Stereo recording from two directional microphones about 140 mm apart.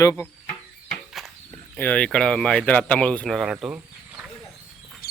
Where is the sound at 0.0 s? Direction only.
20° left (ahead or behind).